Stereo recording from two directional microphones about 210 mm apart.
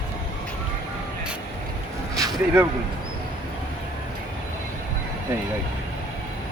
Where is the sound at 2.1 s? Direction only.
15° right (ahead or behind).